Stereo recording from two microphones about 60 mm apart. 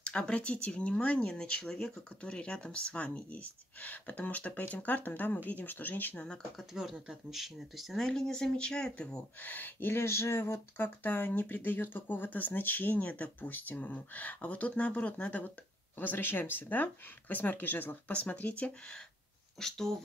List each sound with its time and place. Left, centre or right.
0.0 s speech: centre
6.7 s speech: centre
9.4 s speech: left
10.5 s speech: left
16.0 s speech: left
19.6 s speech: centre